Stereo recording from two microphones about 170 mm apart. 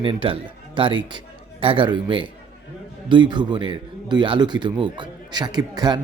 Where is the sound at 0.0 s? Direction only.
30° right (ahead or behind).